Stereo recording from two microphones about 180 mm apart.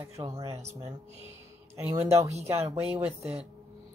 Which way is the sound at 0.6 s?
35° right (ahead or behind).